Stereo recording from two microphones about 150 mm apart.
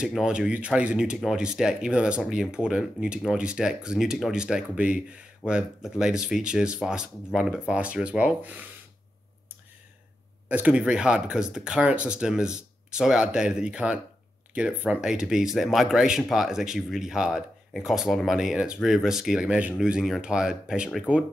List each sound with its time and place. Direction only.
0.0 s speech: 5° right (ahead or behind)
10.5 s speech: 10° right (ahead or behind)